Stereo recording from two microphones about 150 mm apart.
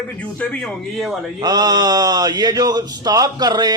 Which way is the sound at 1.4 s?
25° right (ahead or behind).